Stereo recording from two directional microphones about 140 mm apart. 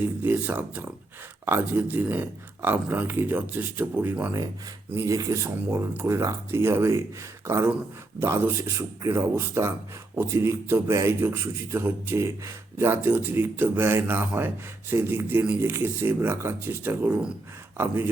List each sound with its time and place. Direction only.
0.0 s a man's voice: 15° right (ahead or behind)